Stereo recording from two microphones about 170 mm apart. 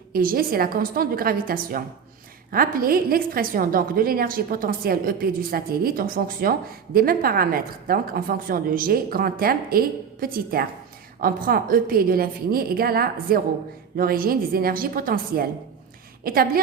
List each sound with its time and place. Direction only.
0.1 s a woman's voice: 55° right (ahead or behind)